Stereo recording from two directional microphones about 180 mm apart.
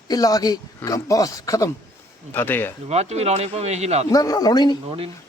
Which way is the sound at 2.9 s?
35° right (ahead or behind).